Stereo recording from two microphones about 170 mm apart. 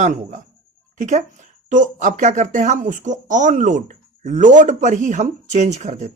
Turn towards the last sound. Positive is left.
turn(degrees=-45)  # may be behind; listen again after turning